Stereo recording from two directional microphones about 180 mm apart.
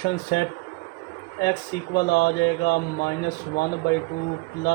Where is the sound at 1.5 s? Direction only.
65° left (ahead or behind).